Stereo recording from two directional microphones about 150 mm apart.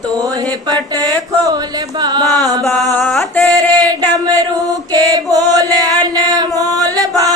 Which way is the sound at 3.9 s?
25° right (ahead or behind).